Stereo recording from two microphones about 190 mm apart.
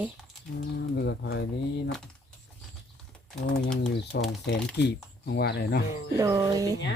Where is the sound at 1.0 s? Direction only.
60° left (ahead or behind).